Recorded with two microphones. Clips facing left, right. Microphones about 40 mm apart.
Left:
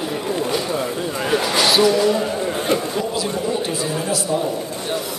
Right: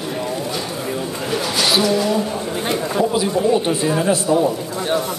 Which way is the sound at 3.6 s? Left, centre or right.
Right.